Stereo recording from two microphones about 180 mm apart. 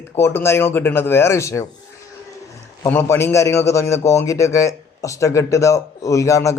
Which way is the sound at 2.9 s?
15° left (ahead or behind).